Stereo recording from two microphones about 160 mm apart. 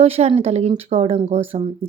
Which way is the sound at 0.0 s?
40° right (ahead or behind).